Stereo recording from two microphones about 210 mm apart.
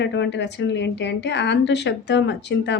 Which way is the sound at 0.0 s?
55° left (ahead or behind).